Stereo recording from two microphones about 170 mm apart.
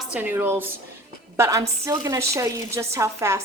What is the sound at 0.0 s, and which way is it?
Speech, 10° right (ahead or behind).